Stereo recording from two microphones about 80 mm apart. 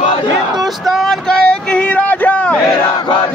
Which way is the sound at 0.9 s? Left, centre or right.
Centre.